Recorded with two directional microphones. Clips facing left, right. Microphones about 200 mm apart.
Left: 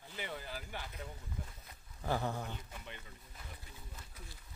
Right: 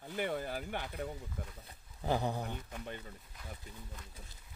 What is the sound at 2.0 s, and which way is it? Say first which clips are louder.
Speech: right 3 dB; 15° right (ahead or behind).